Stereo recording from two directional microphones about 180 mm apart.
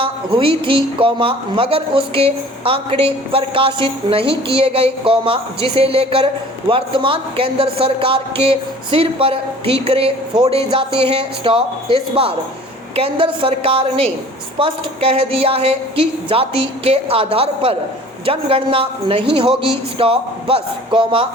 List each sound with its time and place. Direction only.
0.0 s a man's voice: 30° right (ahead or behind)